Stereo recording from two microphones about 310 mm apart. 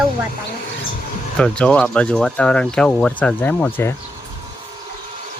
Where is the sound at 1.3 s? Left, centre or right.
Centre.